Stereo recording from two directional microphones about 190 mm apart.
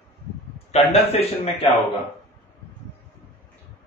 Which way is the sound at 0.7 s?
35° left (ahead or behind).